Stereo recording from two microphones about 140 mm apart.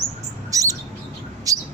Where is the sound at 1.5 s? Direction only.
25° right (ahead or behind).